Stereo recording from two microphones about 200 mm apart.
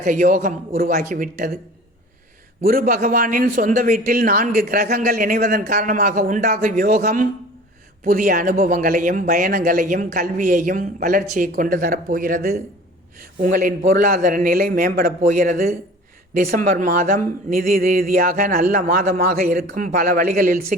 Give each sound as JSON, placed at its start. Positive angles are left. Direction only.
{"t": 0.0, "sound": "a man's voice", "side_deg": -45}
{"t": 2.6, "sound": "a man's voice", "side_deg": -45}